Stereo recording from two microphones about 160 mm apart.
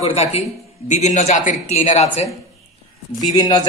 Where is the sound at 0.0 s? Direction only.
40° left (ahead or behind).